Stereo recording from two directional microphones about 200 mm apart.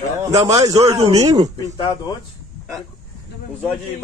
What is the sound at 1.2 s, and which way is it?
Speech, 20° right (ahead or behind).